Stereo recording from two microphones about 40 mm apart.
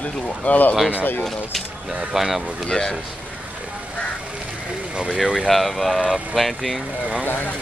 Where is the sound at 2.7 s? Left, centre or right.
Left.